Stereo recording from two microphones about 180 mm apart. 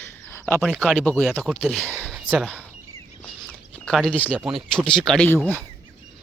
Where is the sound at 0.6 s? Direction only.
Centre (ahead or behind).